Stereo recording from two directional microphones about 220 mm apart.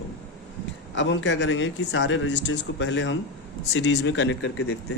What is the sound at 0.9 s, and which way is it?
Speech, 55° left (ahead or behind).